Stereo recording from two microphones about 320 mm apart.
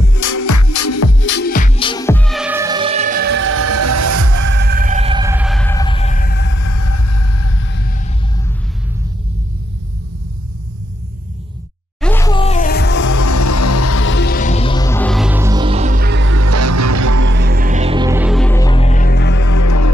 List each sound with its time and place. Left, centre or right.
0.2 s music: left
1.3 s music: left; by 4.5 s right
4.5 s music: right; by 6.6 s left
6.6 s a sound: left
12.0 s music: centre; by 13.1 s left
13.1 s music: left; by 17.3 s right
17.3 s music: right; by 19.4 s left
19.4 s music: left